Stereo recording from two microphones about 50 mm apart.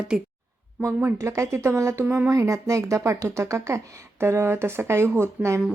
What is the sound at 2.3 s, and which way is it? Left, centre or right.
Speech, right.